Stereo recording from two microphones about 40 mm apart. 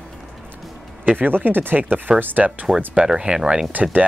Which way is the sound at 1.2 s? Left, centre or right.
Right.